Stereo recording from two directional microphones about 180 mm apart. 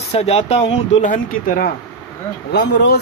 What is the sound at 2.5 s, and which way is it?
Speech, 70° left (ahead or behind).